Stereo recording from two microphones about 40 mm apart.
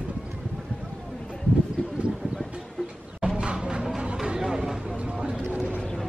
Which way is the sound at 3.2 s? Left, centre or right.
Right.